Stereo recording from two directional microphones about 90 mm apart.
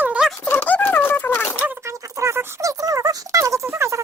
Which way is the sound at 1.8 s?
35° right (ahead or behind).